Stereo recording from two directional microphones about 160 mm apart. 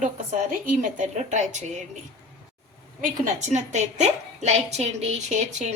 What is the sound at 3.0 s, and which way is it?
Speech, 45° right (ahead or behind).